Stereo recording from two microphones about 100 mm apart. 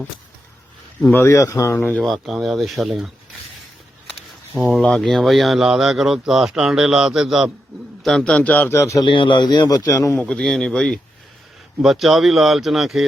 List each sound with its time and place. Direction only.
1.1 s speech: 25° left (ahead or behind)
1.8 s speech: 15° left (ahead or behind)
2.0 s speech: centre (ahead or behind)
4.7 s speech: 5° left (ahead or behind)
8.0 s speech: 5° left (ahead or behind)
8.7 s speech: 30° left (ahead or behind)
9.0 s a man's voice: 55° left (ahead or behind); by 10.2 s 30° left (ahead or behind)
10.2 s speech: 10° left (ahead or behind)